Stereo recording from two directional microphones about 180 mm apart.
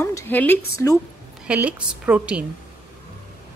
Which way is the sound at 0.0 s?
15° left (ahead or behind).